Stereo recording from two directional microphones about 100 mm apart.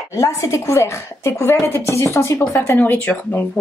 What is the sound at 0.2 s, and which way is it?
A woman's voice, 25° left (ahead or behind).